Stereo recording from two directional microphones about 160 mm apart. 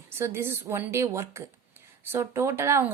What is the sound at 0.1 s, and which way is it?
A woman's voice, 15° right (ahead or behind).